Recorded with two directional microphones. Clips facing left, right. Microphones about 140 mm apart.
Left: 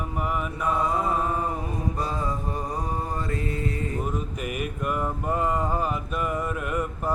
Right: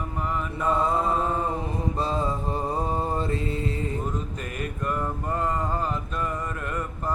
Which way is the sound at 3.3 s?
25° right (ahead or behind).